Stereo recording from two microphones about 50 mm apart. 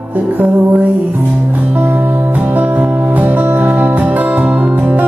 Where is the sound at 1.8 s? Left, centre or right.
Right.